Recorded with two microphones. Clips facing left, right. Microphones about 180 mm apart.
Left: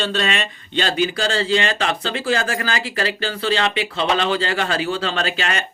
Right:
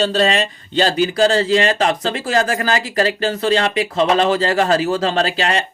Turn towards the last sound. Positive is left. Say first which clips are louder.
# right 5 dB
turn(degrees=-35)  # may be behind; listen again after turning